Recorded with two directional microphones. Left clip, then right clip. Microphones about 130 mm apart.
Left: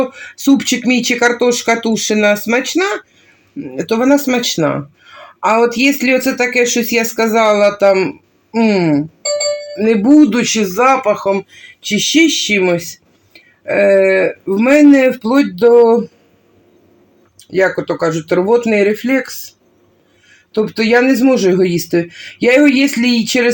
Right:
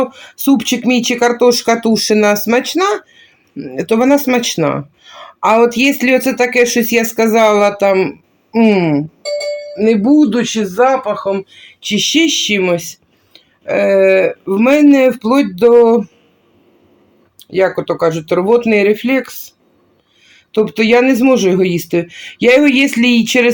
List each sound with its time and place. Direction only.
0.0 s speech: centre (ahead or behind); by 9.0 s 20° right (ahead or behind)
9.7 s speech: 5° right (ahead or behind)
11.9 s speech: 10° right (ahead or behind)
15.2 s speech: centre (ahead or behind)
17.4 s speech: centre (ahead or behind)
20.5 s speech: centre (ahead or behind); by 23.5 s 15° right (ahead or behind)